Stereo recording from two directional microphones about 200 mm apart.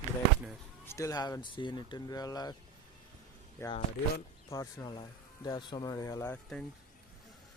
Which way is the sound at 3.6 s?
15° left (ahead or behind).